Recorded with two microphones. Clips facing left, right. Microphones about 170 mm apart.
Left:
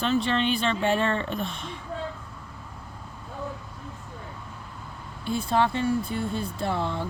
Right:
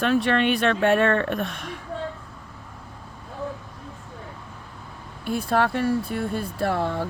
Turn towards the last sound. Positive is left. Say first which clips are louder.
# right 4 dB
turn(degrees=-60)  # may be behind; listen again after turning